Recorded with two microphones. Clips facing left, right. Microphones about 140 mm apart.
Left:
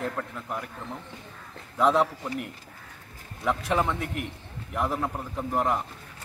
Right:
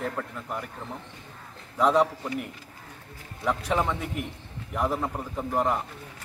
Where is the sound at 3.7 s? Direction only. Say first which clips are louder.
Even; centre (ahead or behind).